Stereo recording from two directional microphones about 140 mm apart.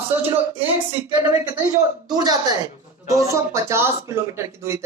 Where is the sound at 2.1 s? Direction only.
30° right (ahead or behind).